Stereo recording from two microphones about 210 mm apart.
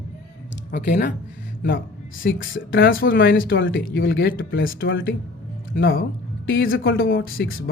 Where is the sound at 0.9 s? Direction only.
40° left (ahead or behind).